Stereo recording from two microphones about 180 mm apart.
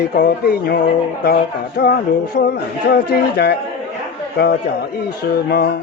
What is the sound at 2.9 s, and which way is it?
Speech, 65° left (ahead or behind).